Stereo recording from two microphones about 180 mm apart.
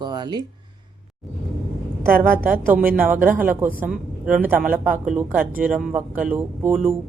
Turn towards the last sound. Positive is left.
turn(degrees=-10)  # may be behind; listen again after turning